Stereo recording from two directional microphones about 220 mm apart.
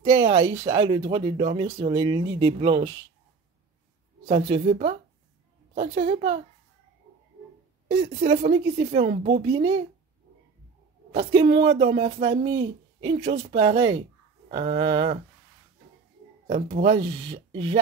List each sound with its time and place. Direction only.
0.0 s speech: 20° right (ahead or behind)
4.3 s speech: 25° right (ahead or behind)
8.0 s speech: 35° right (ahead or behind)
11.5 s speech: 25° right (ahead or behind)
16.4 s speech: 30° right (ahead or behind)